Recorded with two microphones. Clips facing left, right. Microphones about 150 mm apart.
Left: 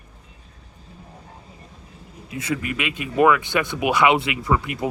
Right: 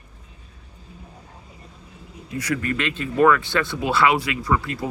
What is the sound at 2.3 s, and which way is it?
Speech, 25° left (ahead or behind).